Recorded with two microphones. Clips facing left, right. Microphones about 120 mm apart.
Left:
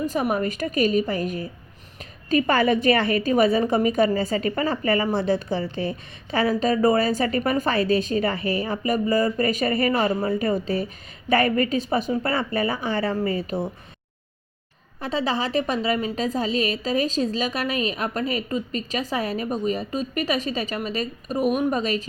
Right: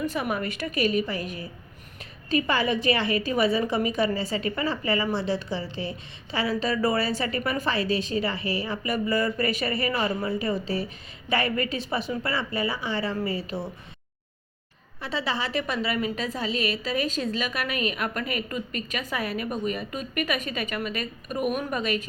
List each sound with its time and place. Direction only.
0.0 s a woman's voice: 40° left (ahead or behind)
15.0 s a woman's voice: 40° left (ahead or behind)